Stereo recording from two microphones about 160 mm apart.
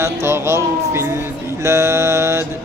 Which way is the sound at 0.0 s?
15° right (ahead or behind).